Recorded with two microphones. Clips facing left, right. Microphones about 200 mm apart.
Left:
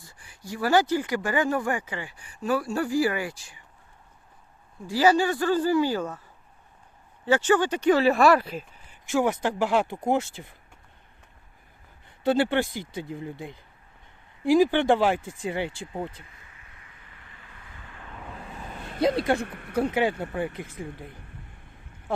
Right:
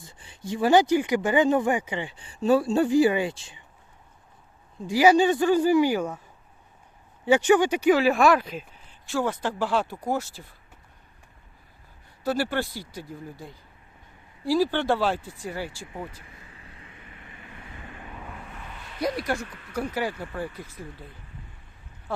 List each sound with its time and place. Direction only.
0.0 s speech: 25° right (ahead or behind)
4.9 s speech: 15° right (ahead or behind)
7.3 s speech: 15° right (ahead or behind); by 10.5 s 20° left (ahead or behind)
12.2 s speech: 25° left (ahead or behind)
16.3 s vehicle: 30° right (ahead or behind)
19.0 s speech: 25° left (ahead or behind)
19.4 s speech: 55° left (ahead or behind)
19.8 s speech: 25° left (ahead or behind)
21.1 s speech: 55° left (ahead or behind)